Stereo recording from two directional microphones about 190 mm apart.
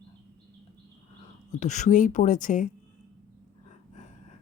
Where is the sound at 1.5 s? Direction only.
40° left (ahead or behind).